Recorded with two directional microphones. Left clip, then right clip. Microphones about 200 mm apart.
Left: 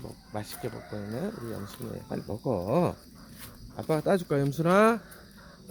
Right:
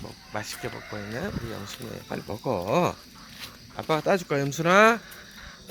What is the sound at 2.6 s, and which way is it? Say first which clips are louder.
Speech: right 4 dB; 10° left (ahead or behind).